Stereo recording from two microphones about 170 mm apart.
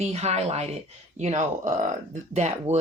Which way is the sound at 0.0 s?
40° right (ahead or behind).